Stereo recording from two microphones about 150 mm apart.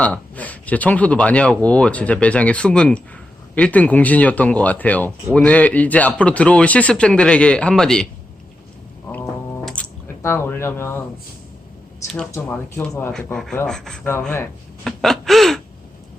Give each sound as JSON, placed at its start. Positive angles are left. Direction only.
{"t": 0.0, "sound": "speech", "side_deg": 10}
{"t": 9.2, "sound": "a sound", "side_deg": 0}
{"t": 10.2, "sound": "speech", "side_deg": 15}
{"t": 12.3, "sound": "speech", "side_deg": 15}
{"t": 14.1, "sound": "speech", "side_deg": 15}
{"t": 14.8, "sound": "gasp", "side_deg": 0}